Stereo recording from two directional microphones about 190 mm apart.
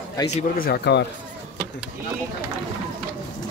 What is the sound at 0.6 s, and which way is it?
Speech, 60° left (ahead or behind).